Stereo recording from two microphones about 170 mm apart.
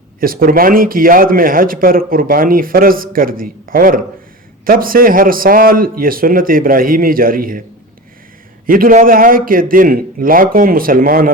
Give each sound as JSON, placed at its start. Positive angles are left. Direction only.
{"t": 0.2, "sound": "a man's voice", "side_deg": -60}
{"t": 8.6, "sound": "a man's voice", "side_deg": -55}